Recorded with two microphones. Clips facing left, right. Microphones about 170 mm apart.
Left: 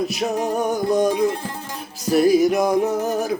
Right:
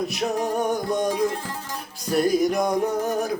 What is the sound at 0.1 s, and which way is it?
Music, centre (ahead or behind).